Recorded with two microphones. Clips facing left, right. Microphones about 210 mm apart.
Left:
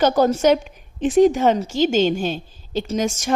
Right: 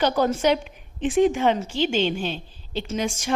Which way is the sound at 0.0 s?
45° left (ahead or behind).